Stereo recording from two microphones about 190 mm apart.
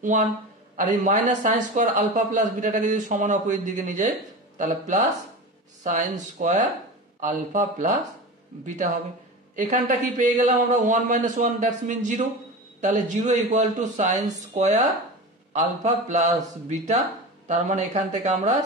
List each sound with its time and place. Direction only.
0.7 s a man's voice: 40° right (ahead or behind)